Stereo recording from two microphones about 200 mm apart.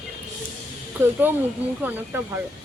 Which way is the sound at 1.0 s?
10° right (ahead or behind).